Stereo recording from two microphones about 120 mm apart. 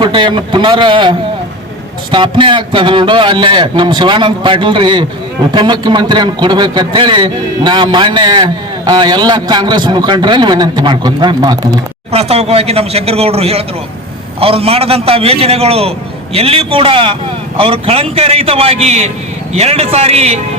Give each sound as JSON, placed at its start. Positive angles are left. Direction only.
{"t": 0.0, "sound": "a man's voice", "side_deg": -40}
{"t": 12.1, "sound": "a man's voice", "side_deg": -60}